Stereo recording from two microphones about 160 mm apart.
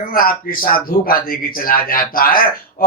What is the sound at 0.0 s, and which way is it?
Speech, 65° left (ahead or behind).